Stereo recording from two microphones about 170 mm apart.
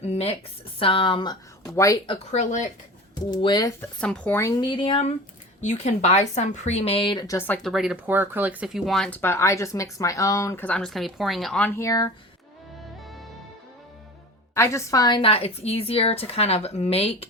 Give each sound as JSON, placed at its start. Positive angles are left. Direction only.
{"t": 0.0, "sound": "a woman's voice", "side_deg": 35}
{"t": 2.0, "sound": "speech", "side_deg": 40}
{"t": 3.2, "sound": "speech", "side_deg": 25}
{"t": 3.8, "sound": "a woman's voice", "side_deg": 5}
{"t": 14.5, "sound": "a woman's voice", "side_deg": 15}